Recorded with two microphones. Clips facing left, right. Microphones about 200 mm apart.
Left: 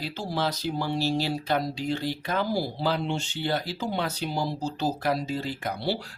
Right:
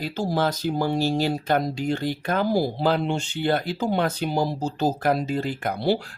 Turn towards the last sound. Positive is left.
turn(degrees=-50)  # may be behind; listen again after turning